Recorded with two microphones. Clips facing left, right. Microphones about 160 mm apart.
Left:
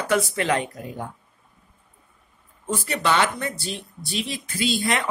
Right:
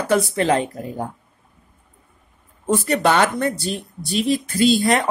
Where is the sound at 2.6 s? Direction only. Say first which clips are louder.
Right 7 dB; 50° right (ahead or behind).